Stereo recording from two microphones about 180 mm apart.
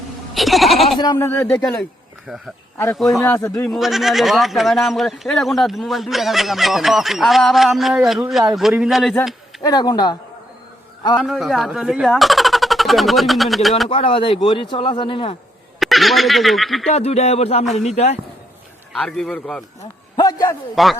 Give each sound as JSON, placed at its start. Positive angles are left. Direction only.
{"t": 0.3, "sound": "goat", "side_deg": 0}
{"t": 0.9, "sound": "speech", "side_deg": 20}
{"t": 1.6, "sound": "speech", "side_deg": 5}
{"t": 2.7, "sound": "a man's voice", "side_deg": 15}
{"t": 3.7, "sound": "speech", "side_deg": 0}
{"t": 9.6, "sound": "speech", "side_deg": 20}
{"t": 11.2, "sound": "speech", "side_deg": 0}
{"t": 13.9, "sound": "speech", "side_deg": 30}
{"t": 15.8, "sound": "speech", "side_deg": 0}
{"t": 16.9, "sound": "speech", "side_deg": 35}
{"t": 18.9, "sound": "speech", "side_deg": 0}
{"t": 20.1, "sound": "a man's voice", "side_deg": 15}
{"t": 20.8, "sound": "speech", "side_deg": 0}